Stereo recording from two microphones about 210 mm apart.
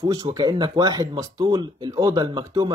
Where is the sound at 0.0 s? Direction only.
20° right (ahead or behind).